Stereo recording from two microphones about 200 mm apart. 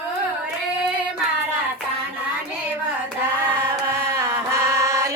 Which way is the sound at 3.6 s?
15° right (ahead or behind).